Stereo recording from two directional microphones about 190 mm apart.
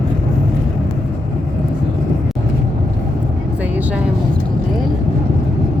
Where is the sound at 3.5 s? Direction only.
10° right (ahead or behind).